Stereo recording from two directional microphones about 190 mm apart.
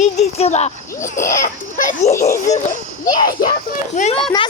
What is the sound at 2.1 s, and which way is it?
Baby laughter, 15° left (ahead or behind).